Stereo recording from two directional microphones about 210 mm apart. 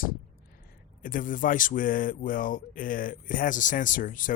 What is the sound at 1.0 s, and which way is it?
Speech, 40° left (ahead or behind).